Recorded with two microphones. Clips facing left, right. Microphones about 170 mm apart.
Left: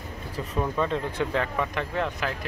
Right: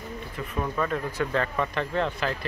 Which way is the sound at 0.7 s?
25° left (ahead or behind).